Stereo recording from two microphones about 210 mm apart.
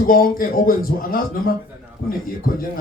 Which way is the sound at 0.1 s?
45° left (ahead or behind).